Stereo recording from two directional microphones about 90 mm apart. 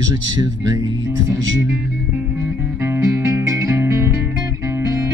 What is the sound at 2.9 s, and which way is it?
Music, 35° right (ahead or behind).